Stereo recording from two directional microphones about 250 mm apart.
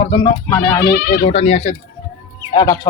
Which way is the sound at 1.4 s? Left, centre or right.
Left.